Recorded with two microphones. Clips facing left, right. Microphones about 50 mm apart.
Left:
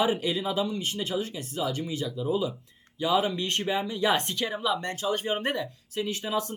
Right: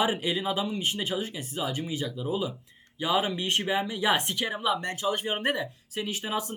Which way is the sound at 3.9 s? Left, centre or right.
Right.